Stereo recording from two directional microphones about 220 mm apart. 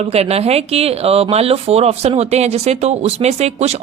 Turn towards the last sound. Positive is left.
turn(degrees=-30)  # may be behind; listen again after turning